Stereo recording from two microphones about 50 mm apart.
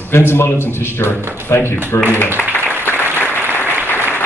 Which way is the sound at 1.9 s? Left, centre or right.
Left.